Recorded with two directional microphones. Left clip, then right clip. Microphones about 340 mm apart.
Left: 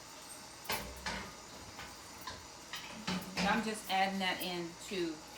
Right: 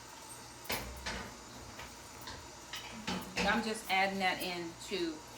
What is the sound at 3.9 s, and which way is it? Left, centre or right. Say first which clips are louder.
Speech: right 2 dB; centre.